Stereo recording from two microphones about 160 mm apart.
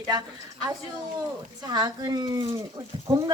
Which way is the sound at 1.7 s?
25° right (ahead or behind).